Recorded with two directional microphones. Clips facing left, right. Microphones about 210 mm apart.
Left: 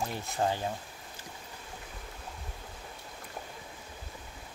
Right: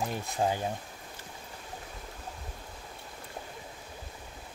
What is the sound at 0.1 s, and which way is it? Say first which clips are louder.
Speech: right 1 dB; 15° right (ahead or behind).